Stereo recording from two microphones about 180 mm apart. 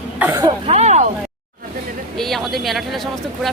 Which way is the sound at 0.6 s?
40° right (ahead or behind).